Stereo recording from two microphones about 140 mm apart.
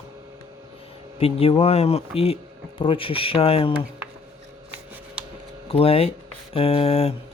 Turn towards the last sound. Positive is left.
turn(degrees=45)  # may be behind; listen again after turning